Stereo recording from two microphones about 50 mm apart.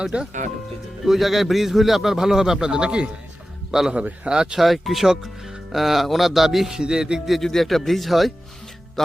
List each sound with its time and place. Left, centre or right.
0.0 s a man's voice: centre
1.0 s a man's voice: centre
3.9 s speech: right
4.6 s speech: centre
6.7 s a man's voice: centre
7.3 s speech: centre